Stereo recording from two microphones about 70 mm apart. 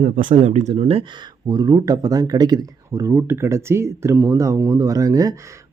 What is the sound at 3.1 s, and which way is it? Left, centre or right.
Speech, right.